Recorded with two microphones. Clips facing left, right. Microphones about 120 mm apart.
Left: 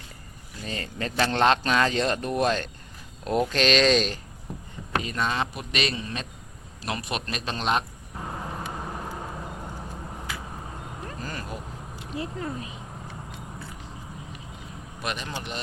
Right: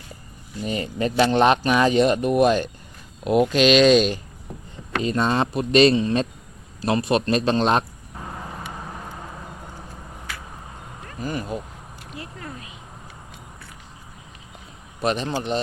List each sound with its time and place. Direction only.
0.6 s speech: 15° right (ahead or behind)
5.0 s speech: 30° right (ahead or behind)
11.2 s speech: 15° right (ahead or behind)
11.9 s speech: 25° left (ahead or behind)
15.0 s speech: 30° right (ahead or behind)